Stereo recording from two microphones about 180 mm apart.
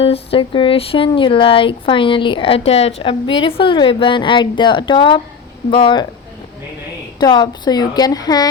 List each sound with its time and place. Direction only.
0.0 s speech: 30° left (ahead or behind)
7.2 s speech: 25° left (ahead or behind)